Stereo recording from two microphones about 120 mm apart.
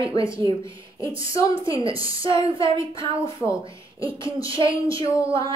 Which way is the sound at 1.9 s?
45° right (ahead or behind).